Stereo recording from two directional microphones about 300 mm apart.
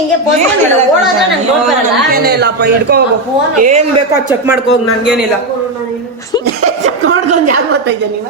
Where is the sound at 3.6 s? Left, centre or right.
Right.